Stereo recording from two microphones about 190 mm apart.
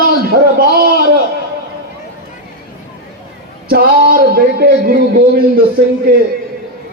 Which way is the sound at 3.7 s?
50° right (ahead or behind).